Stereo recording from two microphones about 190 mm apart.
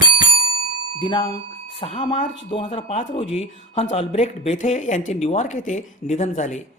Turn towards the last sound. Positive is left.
turn(degrees=40)  # may be behind; listen again after turning